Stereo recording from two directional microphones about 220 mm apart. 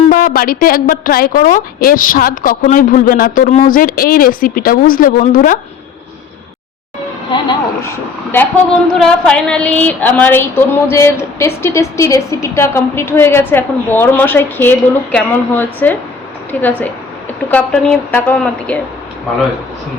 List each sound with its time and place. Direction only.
0.1 s a woman's voice: 40° left (ahead or behind)
8.3 s speech: 5° left (ahead or behind)